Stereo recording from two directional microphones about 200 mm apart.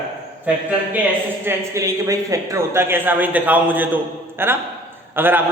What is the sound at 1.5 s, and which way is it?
A woman's voice, 15° right (ahead or behind).